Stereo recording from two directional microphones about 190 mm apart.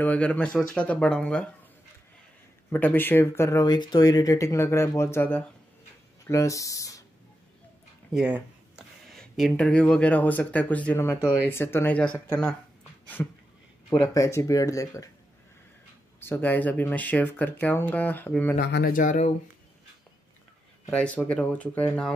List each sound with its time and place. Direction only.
0.0 s speech: 5° left (ahead or behind)
2.7 s speech: 10° left (ahead or behind)
8.1 s speech: 5° right (ahead or behind); by 15.0 s 15° left (ahead or behind)
16.2 s speech: 10° left (ahead or behind)
18.6 s speech: 60° left (ahead or behind); by 19.3 s 40° left (ahead or behind)
20.9 s speech: 5° left (ahead or behind)